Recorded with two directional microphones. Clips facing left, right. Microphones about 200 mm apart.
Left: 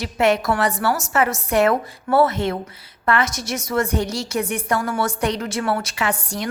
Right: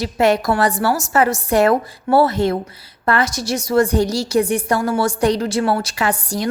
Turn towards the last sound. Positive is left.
turn(degrees=-35)  # may be behind; listen again after turning